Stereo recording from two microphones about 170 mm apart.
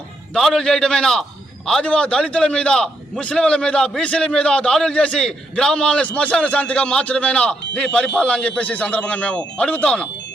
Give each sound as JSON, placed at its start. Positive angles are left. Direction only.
{"t": 0.3, "sound": "a man's voice", "side_deg": 0}